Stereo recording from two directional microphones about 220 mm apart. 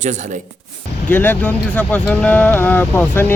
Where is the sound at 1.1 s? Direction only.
10° left (ahead or behind).